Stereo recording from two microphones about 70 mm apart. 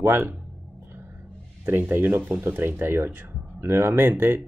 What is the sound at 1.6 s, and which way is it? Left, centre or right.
Speech, right.